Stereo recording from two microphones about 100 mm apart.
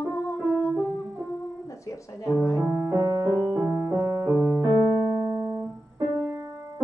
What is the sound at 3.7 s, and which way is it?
Music, 30° right (ahead or behind).